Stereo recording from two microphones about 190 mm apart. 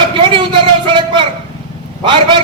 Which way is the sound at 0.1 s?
25° right (ahead or behind).